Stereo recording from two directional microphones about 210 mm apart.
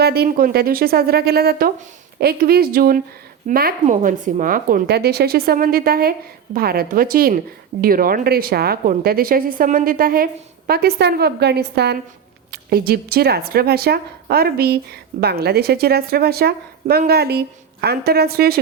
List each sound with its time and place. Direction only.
0.0 s speech: 50° right (ahead or behind)